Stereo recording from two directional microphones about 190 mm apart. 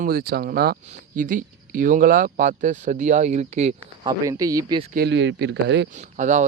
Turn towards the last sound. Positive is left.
turn(degrees=-40)  # may be behind; listen again after turning